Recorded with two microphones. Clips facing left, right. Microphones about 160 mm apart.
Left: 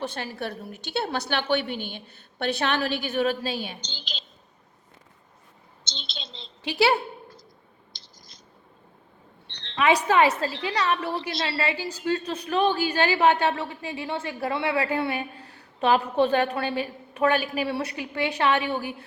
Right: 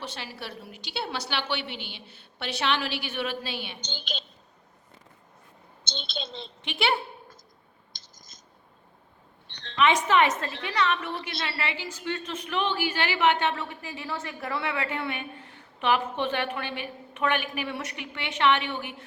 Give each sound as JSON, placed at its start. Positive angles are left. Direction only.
{"t": 0.0, "sound": "a woman's voice", "side_deg": 50}
{"t": 3.8, "sound": "a woman's voice", "side_deg": -55}
{"t": 5.9, "sound": "a woman's voice", "side_deg": -55}
{"t": 6.6, "sound": "a woman's voice", "side_deg": 35}
{"t": 7.9, "sound": "a sound", "side_deg": -45}
{"t": 9.7, "sound": "a woman's voice", "side_deg": 30}